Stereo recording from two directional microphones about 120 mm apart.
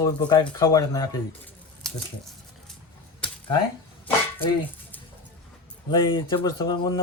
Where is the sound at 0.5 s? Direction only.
30° left (ahead or behind).